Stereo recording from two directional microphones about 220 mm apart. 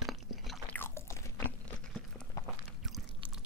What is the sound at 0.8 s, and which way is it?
Chewing, 10° left (ahead or behind).